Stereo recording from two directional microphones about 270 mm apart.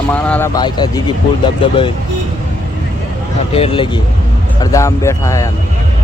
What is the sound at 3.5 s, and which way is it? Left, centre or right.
Speech, left.